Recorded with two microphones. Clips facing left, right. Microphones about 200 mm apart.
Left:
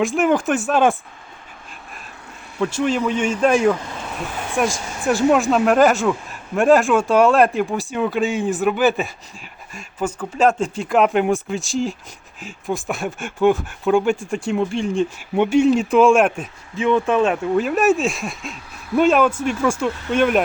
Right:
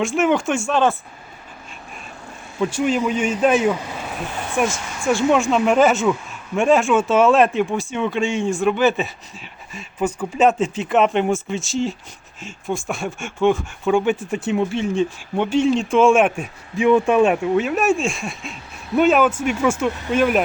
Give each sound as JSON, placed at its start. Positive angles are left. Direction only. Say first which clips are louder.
{"t": 0.0, "sound": "a man's voice", "louder": "left 1 dB", "side_deg": 0}
{"t": 2.6, "sound": "speech", "louder": "even", "side_deg": -5}
{"t": 4.7, "sound": "a sound", "louder": "left 1 dB", "side_deg": 35}
{"t": 5.3, "sound": "a man's voice", "louder": "left 1 dB", "side_deg": 0}
{"t": 10.2, "sound": "a man's voice", "louder": "even", "side_deg": -5}
{"t": 15.4, "sound": "a man's voice", "louder": "left 3 dB", "side_deg": 10}